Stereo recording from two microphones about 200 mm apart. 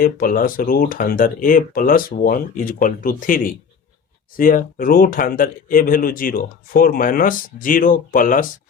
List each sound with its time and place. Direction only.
0.0 s speech: 45° left (ahead or behind)